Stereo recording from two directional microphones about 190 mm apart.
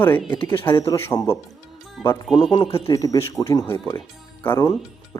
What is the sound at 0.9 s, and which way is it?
Speech, 15° left (ahead or behind).